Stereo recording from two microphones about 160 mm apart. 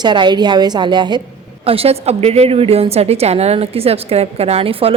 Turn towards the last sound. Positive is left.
turn(degrees=-35)  # may be behind; listen again after turning